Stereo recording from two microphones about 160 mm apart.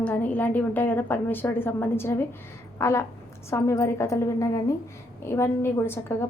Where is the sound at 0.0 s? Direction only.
10° left (ahead or behind).